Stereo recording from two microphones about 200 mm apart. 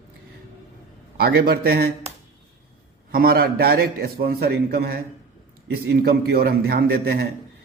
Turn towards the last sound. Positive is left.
turn(degrees=-50)  # may be behind; listen again after turning